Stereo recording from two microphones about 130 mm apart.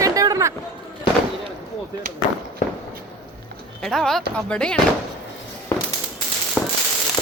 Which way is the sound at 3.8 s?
5° left (ahead or behind).